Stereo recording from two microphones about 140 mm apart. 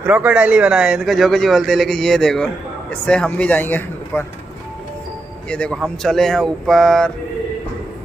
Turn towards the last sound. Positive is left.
turn(degrees=5)  # may be behind; listen again after turning